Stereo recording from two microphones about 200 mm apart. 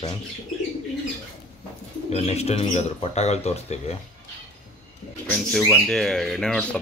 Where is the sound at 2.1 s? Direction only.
30° left (ahead or behind).